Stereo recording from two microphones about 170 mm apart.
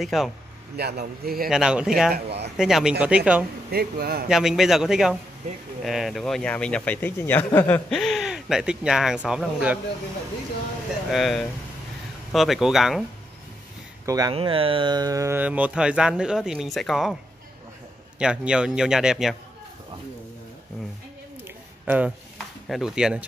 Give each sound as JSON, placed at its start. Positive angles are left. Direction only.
{"t": 0.0, "sound": "speech", "side_deg": 0}
{"t": 0.7, "sound": "a man's voice", "side_deg": -70}
{"t": 1.5, "sound": "speech", "side_deg": -5}
{"t": 2.1, "sound": "speech", "side_deg": -75}
{"t": 2.5, "sound": "speech", "side_deg": -5}
{"t": 3.7, "sound": "a man's voice", "side_deg": -65}
{"t": 4.3, "sound": "speech", "side_deg": 0}
{"t": 11.1, "sound": "speech", "side_deg": 0}
{"t": 14.0, "sound": "speech", "side_deg": -20}
{"t": 14.3, "sound": "speech", "side_deg": -30}
{"t": 18.2, "sound": "speech", "side_deg": -5}
{"t": 21.8, "sound": "speech", "side_deg": -10}